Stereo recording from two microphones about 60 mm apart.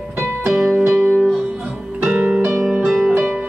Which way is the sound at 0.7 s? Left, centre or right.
Centre.